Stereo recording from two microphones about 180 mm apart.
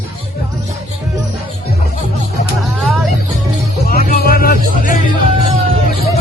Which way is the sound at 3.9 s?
55° left (ahead or behind).